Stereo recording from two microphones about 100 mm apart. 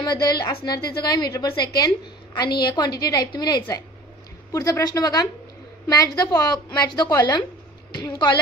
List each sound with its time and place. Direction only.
0.0 s a woman's voice: 45° left (ahead or behind)
4.5 s a woman's voice: 35° left (ahead or behind)